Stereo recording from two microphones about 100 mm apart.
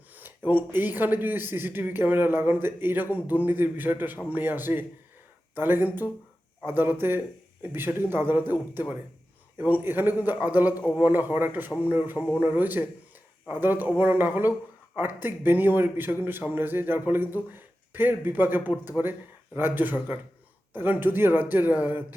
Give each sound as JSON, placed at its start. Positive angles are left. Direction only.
{"t": 0.1, "sound": "a man's voice", "side_deg": -20}